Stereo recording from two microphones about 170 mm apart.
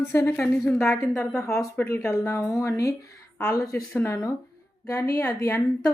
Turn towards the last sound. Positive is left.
turn(degrees=15)  # may be behind; listen again after turning